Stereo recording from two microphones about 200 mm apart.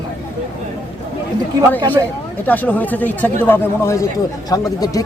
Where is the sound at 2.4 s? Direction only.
10° left (ahead or behind).